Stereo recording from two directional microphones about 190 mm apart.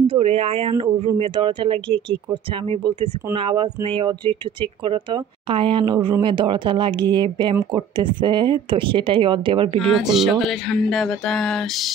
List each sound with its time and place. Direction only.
0.0 s speech: 30° right (ahead or behind)
10.0 s speech: centre (ahead or behind)